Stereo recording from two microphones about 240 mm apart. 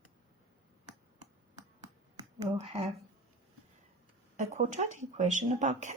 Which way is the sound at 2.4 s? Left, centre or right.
Right.